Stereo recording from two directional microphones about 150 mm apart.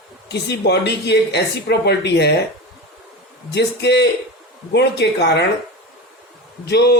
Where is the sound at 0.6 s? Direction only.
90° left.